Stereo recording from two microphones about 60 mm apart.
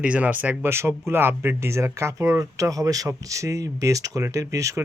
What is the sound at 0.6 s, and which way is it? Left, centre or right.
Speech, right.